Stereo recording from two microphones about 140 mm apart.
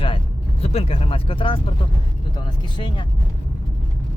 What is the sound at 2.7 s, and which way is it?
Speech, 35° left (ahead or behind).